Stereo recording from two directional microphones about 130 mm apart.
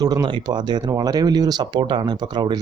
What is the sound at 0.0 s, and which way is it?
Speech, 30° right (ahead or behind).